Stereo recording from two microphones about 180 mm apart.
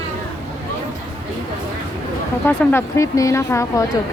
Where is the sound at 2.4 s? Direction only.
15° left (ahead or behind).